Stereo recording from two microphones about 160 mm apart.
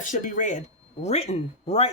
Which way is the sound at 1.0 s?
40° left (ahead or behind).